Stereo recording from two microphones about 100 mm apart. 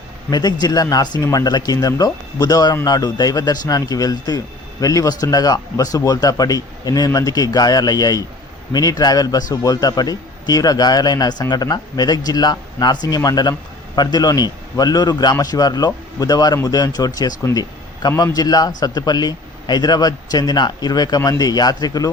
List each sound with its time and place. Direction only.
0.3 s a man's voice: 45° left (ahead or behind)